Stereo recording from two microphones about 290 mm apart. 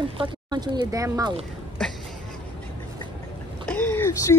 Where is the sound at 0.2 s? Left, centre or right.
Centre.